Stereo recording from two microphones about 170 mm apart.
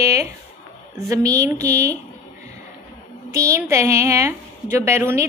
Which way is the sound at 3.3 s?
15° right (ahead or behind).